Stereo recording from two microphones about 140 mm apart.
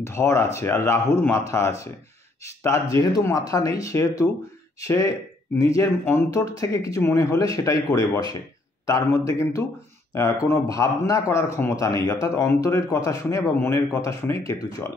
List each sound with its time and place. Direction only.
0.0 s a man's voice: 20° left (ahead or behind)